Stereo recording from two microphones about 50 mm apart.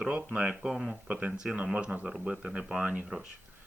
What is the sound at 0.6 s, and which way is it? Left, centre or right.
Speech, centre.